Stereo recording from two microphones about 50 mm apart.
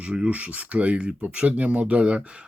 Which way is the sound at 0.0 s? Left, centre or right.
Right.